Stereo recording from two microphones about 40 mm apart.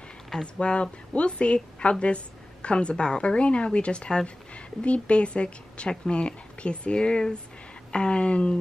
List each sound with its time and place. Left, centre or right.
0.4 s speech: left